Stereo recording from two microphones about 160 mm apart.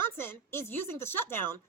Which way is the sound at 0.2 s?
15° left (ahead or behind).